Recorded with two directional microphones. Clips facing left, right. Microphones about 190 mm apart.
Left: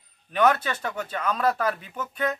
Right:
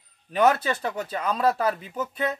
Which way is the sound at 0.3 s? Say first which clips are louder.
Right 1 dB; 35° right (ahead or behind).